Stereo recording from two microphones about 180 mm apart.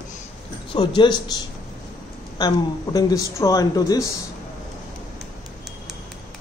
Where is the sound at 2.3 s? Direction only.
20° left (ahead or behind).